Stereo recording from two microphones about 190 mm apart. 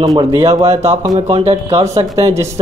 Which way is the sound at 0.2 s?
30° right (ahead or behind).